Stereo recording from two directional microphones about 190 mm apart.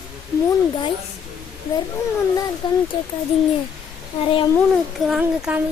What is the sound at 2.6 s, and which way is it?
Speech, 25° left (ahead or behind).